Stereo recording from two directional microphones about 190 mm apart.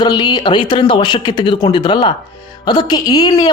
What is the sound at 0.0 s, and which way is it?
Speech, 20° left (ahead or behind).